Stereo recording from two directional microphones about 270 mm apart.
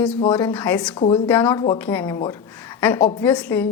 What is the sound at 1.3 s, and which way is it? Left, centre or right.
A woman's voice, centre.